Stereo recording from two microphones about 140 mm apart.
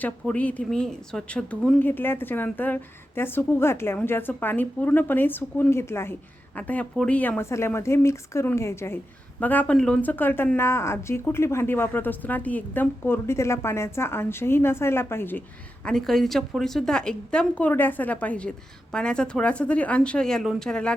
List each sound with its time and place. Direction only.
0.0 s speech: 10° left (ahead or behind)
15.9 s speech: 5° left (ahead or behind)